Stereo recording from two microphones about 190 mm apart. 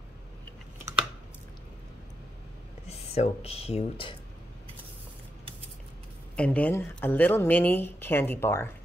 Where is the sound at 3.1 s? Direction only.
35° left (ahead or behind).